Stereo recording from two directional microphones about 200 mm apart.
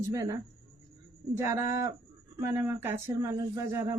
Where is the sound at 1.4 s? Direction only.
15° right (ahead or behind).